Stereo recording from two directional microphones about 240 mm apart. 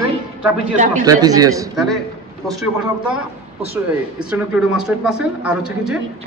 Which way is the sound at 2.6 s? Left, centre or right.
Centre.